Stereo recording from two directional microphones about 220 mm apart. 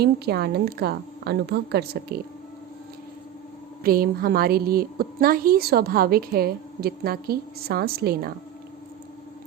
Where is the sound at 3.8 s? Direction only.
40° right (ahead or behind).